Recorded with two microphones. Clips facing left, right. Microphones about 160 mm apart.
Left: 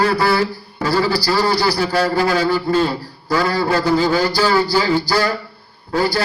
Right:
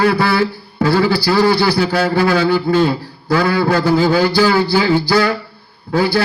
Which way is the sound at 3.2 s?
60° right (ahead or behind).